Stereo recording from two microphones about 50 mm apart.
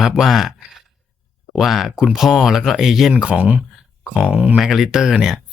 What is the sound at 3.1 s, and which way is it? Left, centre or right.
Speech, right.